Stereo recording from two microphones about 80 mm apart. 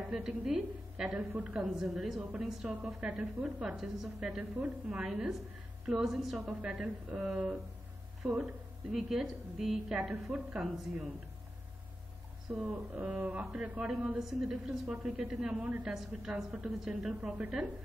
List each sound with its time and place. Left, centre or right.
0.1 s a woman's voice: centre
12.5 s a woman's voice: centre
15.6 s a woman's voice: centre
15.9 s a woman's voice: centre